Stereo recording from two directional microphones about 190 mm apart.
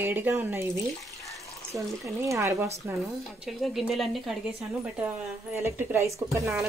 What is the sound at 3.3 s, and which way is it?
Speech, centre (ahead or behind).